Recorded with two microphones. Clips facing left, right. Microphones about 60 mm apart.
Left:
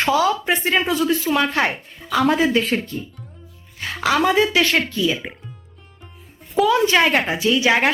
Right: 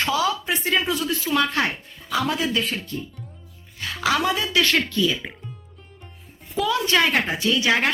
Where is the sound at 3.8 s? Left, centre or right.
Left.